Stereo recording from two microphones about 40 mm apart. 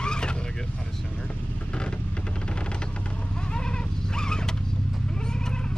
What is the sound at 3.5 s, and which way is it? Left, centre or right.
Goat, left.